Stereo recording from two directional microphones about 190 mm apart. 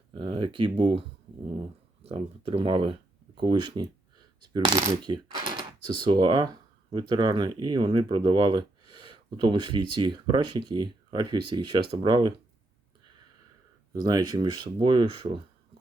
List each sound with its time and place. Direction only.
0.2 s speech: 25° right (ahead or behind)
2.0 s speech: 30° right (ahead or behind)
13.9 s speech: 20° right (ahead or behind)